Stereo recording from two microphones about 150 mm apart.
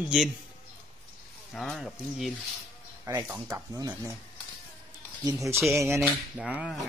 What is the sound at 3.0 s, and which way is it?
Speech, 20° right (ahead or behind).